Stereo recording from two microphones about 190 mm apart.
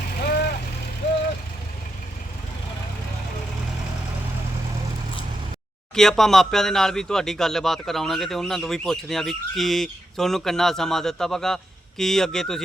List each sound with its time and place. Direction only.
0.3 s vehicle: 55° left (ahead or behind)
5.9 s speech: centre (ahead or behind)